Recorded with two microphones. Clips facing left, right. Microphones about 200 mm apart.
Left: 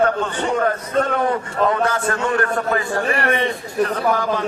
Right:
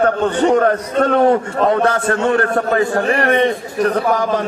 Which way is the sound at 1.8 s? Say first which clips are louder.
Right 5 dB; 65° right (ahead or behind).